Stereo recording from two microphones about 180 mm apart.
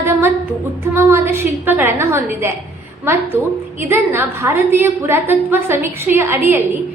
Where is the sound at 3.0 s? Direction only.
15° right (ahead or behind).